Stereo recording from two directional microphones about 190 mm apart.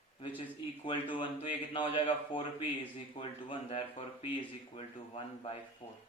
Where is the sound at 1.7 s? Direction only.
25° left (ahead or behind).